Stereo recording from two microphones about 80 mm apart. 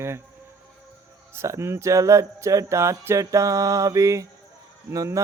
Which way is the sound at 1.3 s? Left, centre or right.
Right.